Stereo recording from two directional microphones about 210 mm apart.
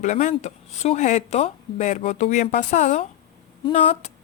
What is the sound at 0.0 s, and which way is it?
Speech, 35° left (ahead or behind).